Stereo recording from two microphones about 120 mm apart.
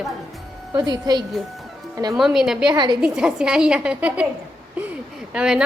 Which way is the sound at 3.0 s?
5° right (ahead or behind).